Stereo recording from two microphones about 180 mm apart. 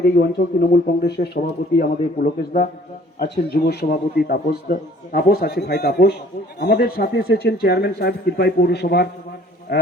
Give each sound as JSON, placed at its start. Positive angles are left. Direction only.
{"t": 0.0, "sound": "a man's voice", "side_deg": 65}
{"t": 1.8, "sound": "a man's voice", "side_deg": 55}